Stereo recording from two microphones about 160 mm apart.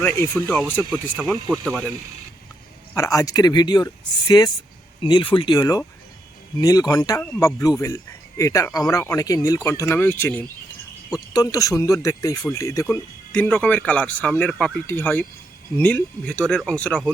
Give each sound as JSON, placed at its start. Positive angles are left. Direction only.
{"t": 0.0, "sound": "speech", "side_deg": 15}
{"t": 0.9, "sound": "speech", "side_deg": 5}
{"t": 2.9, "sound": "speech", "side_deg": 20}
{"t": 11.1, "sound": "speech", "side_deg": 25}